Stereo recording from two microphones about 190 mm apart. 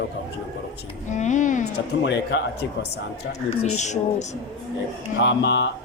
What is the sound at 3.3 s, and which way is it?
Speech, 40° left (ahead or behind).